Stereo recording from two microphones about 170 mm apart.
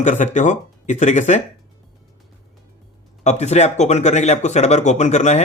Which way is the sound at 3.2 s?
40° left (ahead or behind).